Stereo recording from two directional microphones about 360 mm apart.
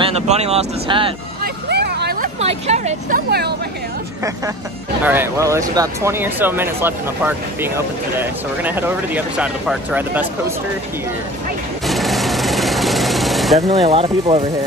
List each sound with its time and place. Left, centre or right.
0.0 s speech: centre
1.4 s vehicle: right
5.0 s speech: centre
11.9 s sewing machine: centre
13.6 s speech: centre